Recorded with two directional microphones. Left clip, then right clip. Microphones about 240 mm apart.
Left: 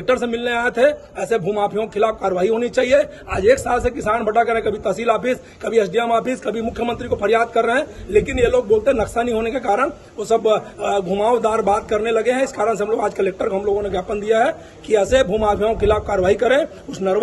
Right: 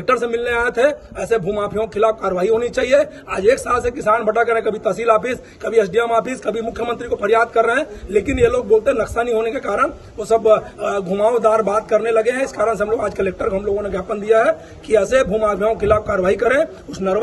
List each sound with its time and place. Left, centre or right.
0.0 s a man's voice: centre